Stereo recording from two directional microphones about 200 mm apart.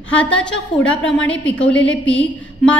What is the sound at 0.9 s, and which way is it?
Speech, 70° left (ahead or behind).